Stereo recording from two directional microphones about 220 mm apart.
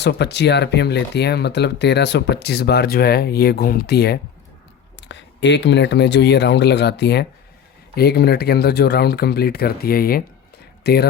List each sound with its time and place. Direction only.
0.0 s speech: 50° left (ahead or behind)